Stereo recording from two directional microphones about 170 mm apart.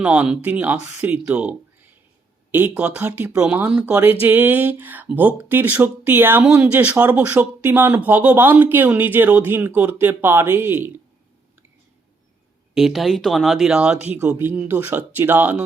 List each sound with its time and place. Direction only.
0.0 s speech: 10° right (ahead or behind)
12.7 s speech: centre (ahead or behind)